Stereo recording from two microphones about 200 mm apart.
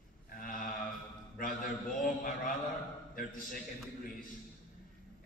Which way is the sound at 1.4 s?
45° left (ahead or behind).